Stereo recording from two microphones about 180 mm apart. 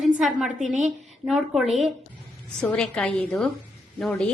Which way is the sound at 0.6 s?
40° right (ahead or behind).